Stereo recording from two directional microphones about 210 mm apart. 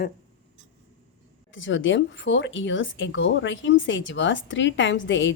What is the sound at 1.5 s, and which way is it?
Speech, 60° left (ahead or behind).